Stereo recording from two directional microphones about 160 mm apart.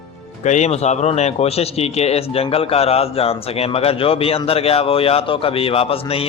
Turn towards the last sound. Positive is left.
turn(degrees=35)  # may be behind; listen again after turning